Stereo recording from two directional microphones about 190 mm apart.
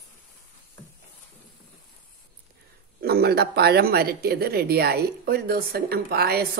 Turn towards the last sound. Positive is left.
turn(degrees=-55)  # may be behind; listen again after turning